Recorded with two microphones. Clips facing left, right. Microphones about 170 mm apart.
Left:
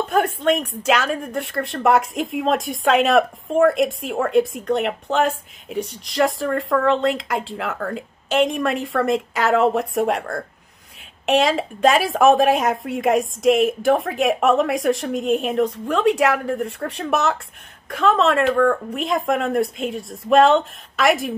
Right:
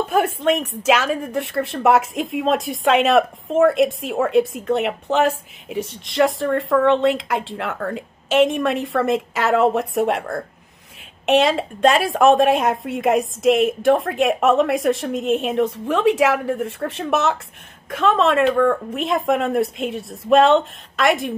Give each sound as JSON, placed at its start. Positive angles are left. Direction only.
{"t": 0.1, "sound": "a woman's voice", "side_deg": -5}